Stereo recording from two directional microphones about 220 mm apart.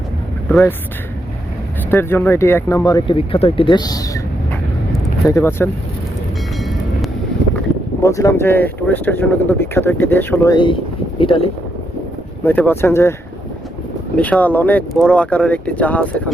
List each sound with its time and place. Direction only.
0.4 s speech: 10° left (ahead or behind)
1.9 s speech: 10° left (ahead or behind)
5.2 s speech: 10° left (ahead or behind)
8.0 s speech: 15° left (ahead or behind)
12.5 s speech: 10° left (ahead or behind)
14.2 s speech: 5° left (ahead or behind)